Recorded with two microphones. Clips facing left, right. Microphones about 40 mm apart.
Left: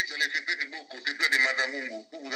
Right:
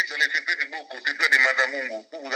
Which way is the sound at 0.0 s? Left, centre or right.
Right.